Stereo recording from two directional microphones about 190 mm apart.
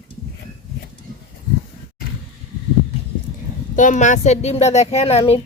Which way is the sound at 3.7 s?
40° left (ahead or behind).